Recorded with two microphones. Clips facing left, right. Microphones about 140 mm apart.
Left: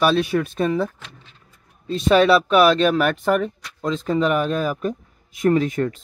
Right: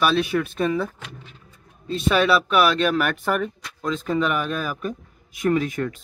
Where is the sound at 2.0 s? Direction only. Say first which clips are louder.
Left 5 dB; 30° left (ahead or behind).